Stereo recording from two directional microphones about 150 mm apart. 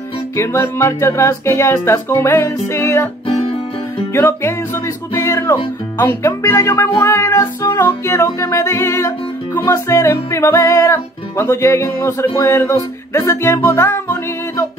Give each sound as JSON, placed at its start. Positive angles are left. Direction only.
{"t": 0.4, "sound": "music", "side_deg": 20}
{"t": 4.1, "sound": "music", "side_deg": 20}